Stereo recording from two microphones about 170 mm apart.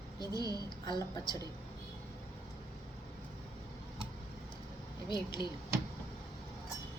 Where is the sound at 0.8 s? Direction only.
25° left (ahead or behind).